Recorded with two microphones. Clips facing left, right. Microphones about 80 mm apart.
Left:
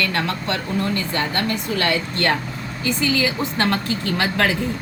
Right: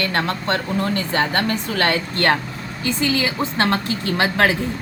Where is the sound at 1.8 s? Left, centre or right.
Right.